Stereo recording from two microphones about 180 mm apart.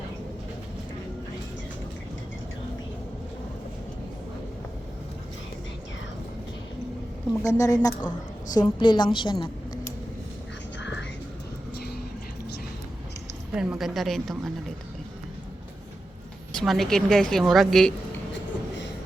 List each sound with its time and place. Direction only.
7.4 s a woman's voice: 20° left (ahead or behind)
10.8 s music: 85° left
13.6 s a woman's voice: 5° right (ahead or behind)
16.6 s a woman's voice: centre (ahead or behind)